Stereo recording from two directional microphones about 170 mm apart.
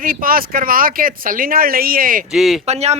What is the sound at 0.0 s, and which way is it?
A man's voice, 55° right (ahead or behind).